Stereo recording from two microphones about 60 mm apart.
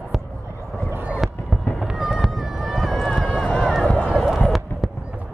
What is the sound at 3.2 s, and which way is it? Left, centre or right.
Run, left.